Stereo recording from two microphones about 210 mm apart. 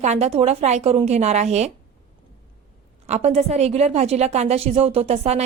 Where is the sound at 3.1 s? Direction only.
30° right (ahead or behind).